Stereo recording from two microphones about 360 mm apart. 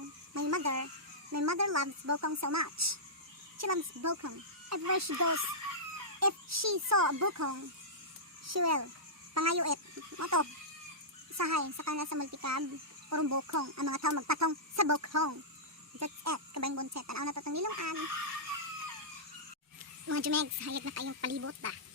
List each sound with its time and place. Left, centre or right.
0.3 s a sound: right
1.3 s a child's voice: right
20.1 s speech: right